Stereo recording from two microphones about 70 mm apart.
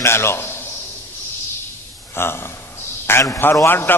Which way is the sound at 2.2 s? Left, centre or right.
Left.